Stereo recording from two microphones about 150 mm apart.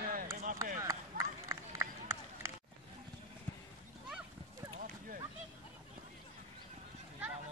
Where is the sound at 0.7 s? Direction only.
20° right (ahead or behind).